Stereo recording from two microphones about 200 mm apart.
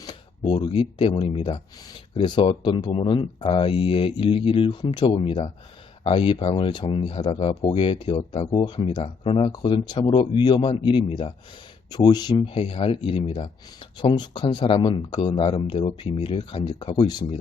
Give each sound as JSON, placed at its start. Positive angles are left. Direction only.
{"t": 0.0, "sound": "speech", "side_deg": 20}